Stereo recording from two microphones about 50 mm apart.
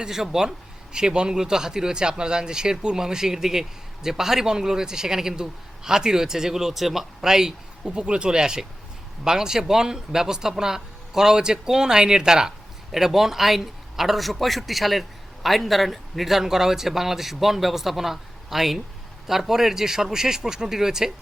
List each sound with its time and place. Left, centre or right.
0.0 s speech: centre